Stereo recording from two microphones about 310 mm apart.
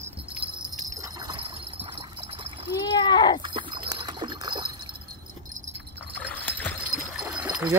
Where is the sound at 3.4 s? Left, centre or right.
Centre.